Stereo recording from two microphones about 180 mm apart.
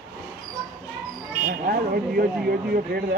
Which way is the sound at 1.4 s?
55° right (ahead or behind).